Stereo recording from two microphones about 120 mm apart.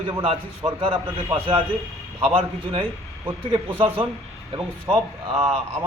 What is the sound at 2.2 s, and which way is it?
Speech, 50° right (ahead or behind).